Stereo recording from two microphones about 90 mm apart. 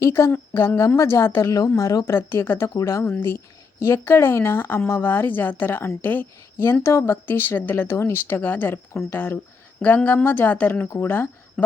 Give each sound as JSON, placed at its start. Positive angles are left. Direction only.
{"t": 0.0, "sound": "speech", "side_deg": 30}
{"t": 1.5, "sound": "speech", "side_deg": 45}
{"t": 2.1, "sound": "speech", "side_deg": 25}
{"t": 3.0, "sound": "speech", "side_deg": 25}